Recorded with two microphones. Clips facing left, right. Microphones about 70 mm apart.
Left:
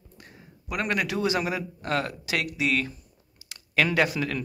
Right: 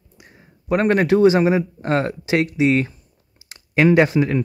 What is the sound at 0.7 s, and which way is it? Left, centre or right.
Speech, right.